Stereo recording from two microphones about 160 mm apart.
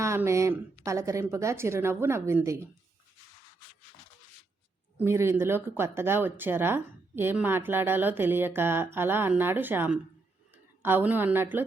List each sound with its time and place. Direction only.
0.0 s speech: 15° right (ahead or behind)
4.9 s speech: 15° right (ahead or behind)